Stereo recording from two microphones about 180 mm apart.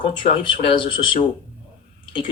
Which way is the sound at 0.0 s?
25° left (ahead or behind).